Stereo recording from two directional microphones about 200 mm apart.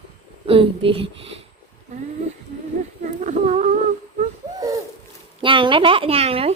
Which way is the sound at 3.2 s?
40° right (ahead or behind).